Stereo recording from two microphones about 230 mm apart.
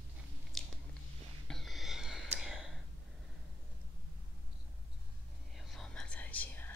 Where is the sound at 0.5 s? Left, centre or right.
Centre.